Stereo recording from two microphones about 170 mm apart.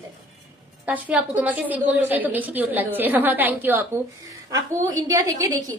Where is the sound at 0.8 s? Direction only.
10° right (ahead or behind).